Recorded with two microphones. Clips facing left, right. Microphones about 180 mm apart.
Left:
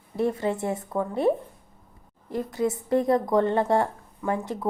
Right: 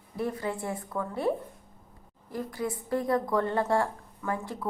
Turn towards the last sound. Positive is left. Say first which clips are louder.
# left 5 dB
turn(degrees=20)  # may be behind; listen again after turning